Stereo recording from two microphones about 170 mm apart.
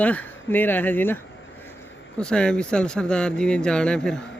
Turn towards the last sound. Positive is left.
turn(degrees=5)  # may be behind; listen again after turning